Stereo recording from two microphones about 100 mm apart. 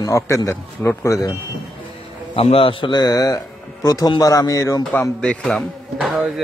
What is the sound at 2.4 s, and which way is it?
Speech, 70° left (ahead or behind).